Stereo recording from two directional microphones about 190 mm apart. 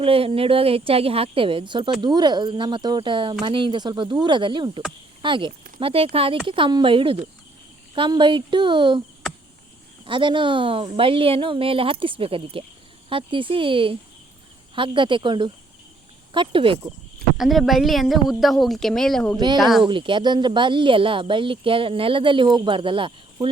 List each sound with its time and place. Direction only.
0.0 s speech: 30° right (ahead or behind)
10.1 s speech: 25° right (ahead or behind)
17.3 s a woman's voice: centre (ahead or behind)
19.8 s speech: 25° right (ahead or behind)